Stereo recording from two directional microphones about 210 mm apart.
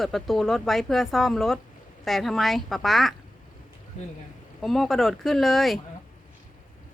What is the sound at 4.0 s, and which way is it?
Speech, 35° left (ahead or behind).